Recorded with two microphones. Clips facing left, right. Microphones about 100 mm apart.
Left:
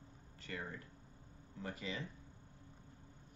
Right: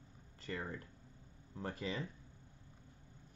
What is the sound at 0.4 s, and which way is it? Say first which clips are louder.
Speech: right 3 dB; 35° right (ahead or behind).